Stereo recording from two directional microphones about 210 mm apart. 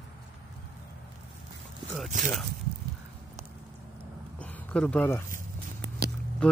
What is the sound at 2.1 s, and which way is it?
Speech, 35° right (ahead or behind).